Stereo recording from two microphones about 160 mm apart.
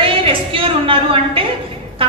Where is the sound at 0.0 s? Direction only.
35° right (ahead or behind).